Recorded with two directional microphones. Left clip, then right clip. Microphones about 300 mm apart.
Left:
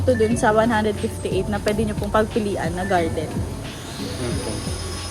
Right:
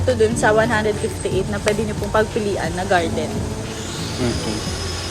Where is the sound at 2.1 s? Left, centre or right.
Left.